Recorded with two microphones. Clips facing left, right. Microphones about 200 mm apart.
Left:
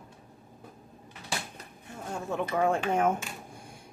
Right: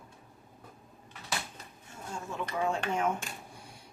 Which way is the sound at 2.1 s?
60° left (ahead or behind).